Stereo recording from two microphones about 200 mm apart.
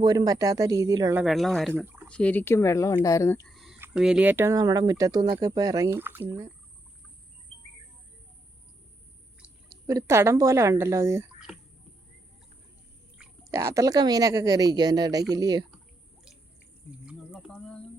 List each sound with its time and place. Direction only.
0.0 s speech: 20° right (ahead or behind)
1.2 s speech: centre (ahead or behind)
1.7 s speech: 10° right (ahead or behind)
2.0 s speech: 5° left (ahead or behind)
3.4 s a sound: centre (ahead or behind)
3.8 s speech: 5° right (ahead or behind)
9.8 s speech: 15° right (ahead or behind)
11.3 s a sound: centre (ahead or behind)
13.4 s speech: 15° right (ahead or behind)
17.1 s bird: 5° right (ahead or behind)